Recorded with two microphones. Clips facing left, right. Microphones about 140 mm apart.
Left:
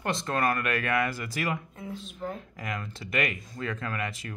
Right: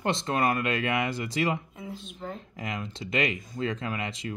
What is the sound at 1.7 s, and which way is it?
Speech, centre (ahead or behind).